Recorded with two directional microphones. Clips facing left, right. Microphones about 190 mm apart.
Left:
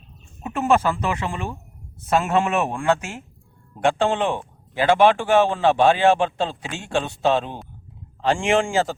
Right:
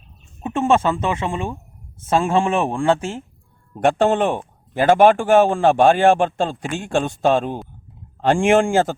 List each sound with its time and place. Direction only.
0.4 s speech: 25° right (ahead or behind)
4.0 s a man's voice: 45° right (ahead or behind)